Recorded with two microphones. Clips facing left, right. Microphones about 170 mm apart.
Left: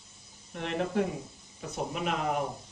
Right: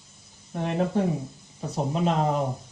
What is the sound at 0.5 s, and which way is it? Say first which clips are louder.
Speech: right 5 dB; 35° right (ahead or behind).